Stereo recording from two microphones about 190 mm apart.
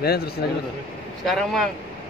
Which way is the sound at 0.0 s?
55° left (ahead or behind).